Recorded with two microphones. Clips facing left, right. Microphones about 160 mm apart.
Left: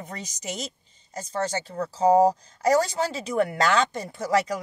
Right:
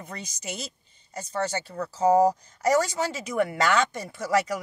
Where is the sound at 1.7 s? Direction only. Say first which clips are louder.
Left 2 dB; 30° left (ahead or behind).